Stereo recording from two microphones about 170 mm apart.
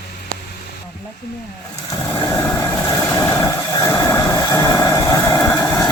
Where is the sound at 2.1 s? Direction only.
10° left (ahead or behind).